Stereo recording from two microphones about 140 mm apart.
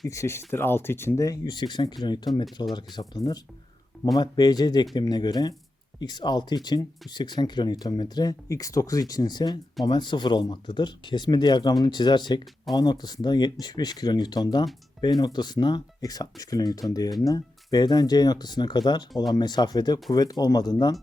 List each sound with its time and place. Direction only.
0.1 s speech: 20° left (ahead or behind)